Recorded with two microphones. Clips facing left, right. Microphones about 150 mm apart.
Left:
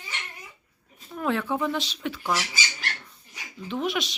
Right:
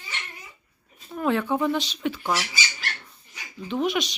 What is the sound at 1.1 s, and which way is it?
A woman's voice, centre (ahead or behind).